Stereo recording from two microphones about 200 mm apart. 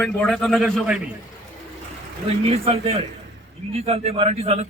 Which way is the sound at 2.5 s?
30° right (ahead or behind).